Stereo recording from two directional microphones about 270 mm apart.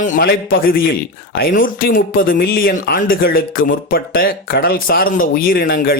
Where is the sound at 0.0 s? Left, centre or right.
Left.